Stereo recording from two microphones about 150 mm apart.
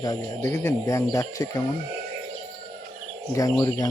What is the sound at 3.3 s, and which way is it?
Speech, 25° left (ahead or behind).